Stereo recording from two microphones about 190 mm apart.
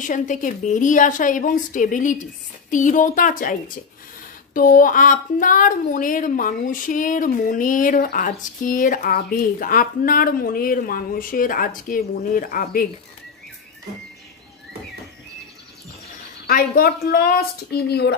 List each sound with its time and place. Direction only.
0.0 s speech: 45° left (ahead or behind)
16.4 s speech: 50° left (ahead or behind)